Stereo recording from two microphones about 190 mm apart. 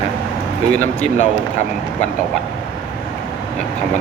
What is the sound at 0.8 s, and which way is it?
Speech, 40° left (ahead or behind).